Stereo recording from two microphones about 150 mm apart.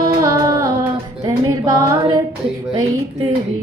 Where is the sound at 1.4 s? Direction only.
20° right (ahead or behind).